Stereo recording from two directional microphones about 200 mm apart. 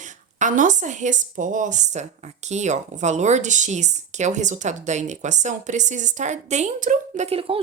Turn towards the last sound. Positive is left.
turn(degrees=-30)  # may be behind; listen again after turning